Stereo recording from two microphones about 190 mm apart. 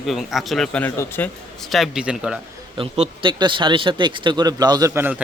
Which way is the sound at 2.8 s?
25° right (ahead or behind).